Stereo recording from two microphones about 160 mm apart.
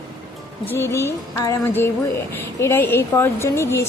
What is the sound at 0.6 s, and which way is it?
Speech, 15° left (ahead or behind).